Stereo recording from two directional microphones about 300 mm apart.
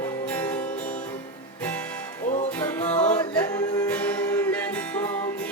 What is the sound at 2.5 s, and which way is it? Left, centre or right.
Music, centre.